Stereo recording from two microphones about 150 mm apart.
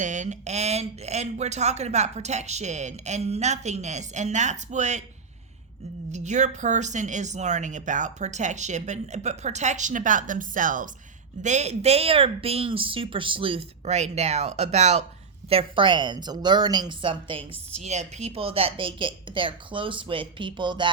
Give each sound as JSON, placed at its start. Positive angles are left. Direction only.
{"t": 0.0, "sound": "speech", "side_deg": -55}
{"t": 6.1, "sound": "speech", "side_deg": -50}
{"t": 11.4, "sound": "speech", "side_deg": -50}
{"t": 15.4, "sound": "speech", "side_deg": -35}